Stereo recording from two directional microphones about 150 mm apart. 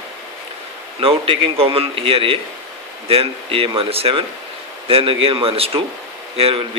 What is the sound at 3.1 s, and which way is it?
Speech, 40° right (ahead or behind).